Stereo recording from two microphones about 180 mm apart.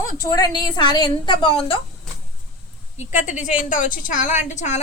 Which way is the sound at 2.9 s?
40° left (ahead or behind).